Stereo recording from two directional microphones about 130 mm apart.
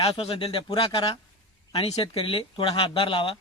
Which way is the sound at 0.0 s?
45° left (ahead or behind).